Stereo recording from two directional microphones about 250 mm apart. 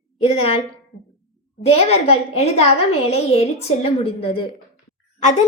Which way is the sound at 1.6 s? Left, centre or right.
Left.